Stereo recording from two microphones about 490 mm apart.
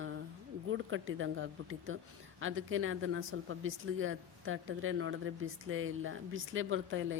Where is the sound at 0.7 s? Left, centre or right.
Right.